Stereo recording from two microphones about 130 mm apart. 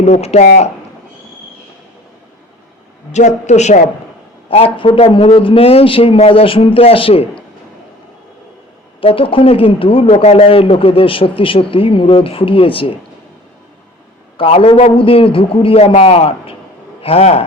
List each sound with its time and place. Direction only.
0.0 s speech: 55° left (ahead or behind)
3.1 s speech: 60° left (ahead or behind)
4.4 s speech: 45° left (ahead or behind)
9.0 s speech: 45° left (ahead or behind)
14.3 s a man's voice: 45° left (ahead or behind)